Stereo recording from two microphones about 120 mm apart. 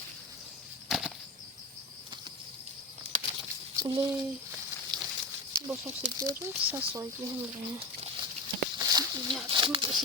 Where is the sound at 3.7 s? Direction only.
40° right (ahead or behind).